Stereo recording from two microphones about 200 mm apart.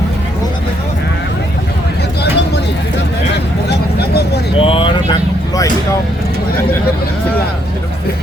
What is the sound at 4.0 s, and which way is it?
Vehicle, 55° left (ahead or behind).